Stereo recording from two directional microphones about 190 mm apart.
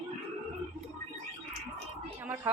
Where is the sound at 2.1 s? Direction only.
15° right (ahead or behind).